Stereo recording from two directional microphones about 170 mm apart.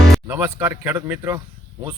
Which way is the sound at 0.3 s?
15° right (ahead or behind).